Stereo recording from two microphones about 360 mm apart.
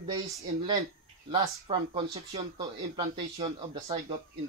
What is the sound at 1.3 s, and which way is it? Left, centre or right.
Speech, centre.